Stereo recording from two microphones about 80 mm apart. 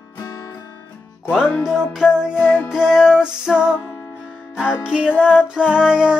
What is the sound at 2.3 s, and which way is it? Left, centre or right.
Music, left.